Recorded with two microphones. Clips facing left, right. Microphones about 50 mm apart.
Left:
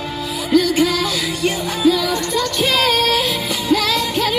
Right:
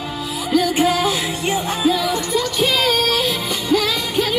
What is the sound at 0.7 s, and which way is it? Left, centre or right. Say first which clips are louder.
Music: even; right.